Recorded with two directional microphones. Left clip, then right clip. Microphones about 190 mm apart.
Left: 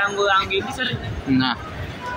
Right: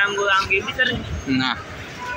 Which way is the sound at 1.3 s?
10° left (ahead or behind).